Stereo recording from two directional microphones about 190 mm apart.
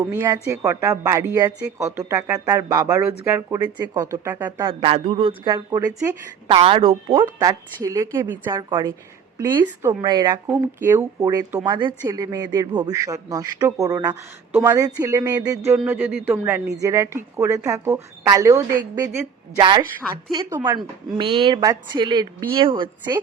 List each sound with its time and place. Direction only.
0.0 s speech: 15° right (ahead or behind)
4.6 s speech: 30° right (ahead or behind)
7.3 s speech: 20° right (ahead or behind)
15.8 s speech: 5° right (ahead or behind); by 22.9 s 25° right (ahead or behind)